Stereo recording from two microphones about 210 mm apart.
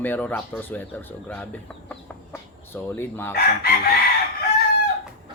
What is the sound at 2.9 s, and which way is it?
Speech, 10° left (ahead or behind).